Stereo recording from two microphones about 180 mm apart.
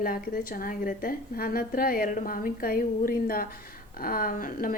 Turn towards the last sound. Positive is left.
turn(degrees=50)  # may be behind; listen again after turning